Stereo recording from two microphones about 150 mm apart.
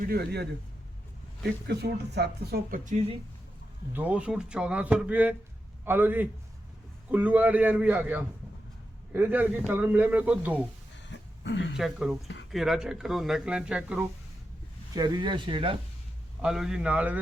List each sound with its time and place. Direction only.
0.1 s speech: 90° right
1.6 s speech: 90° right; by 3.0 s 60° right (ahead or behind)
3.9 s a man's voice: 10° right (ahead or behind)
11.8 s speech: centre (ahead or behind)
14.9 s speech: 30° right (ahead or behind)
16.4 s a man's voice: 5° right (ahead or behind)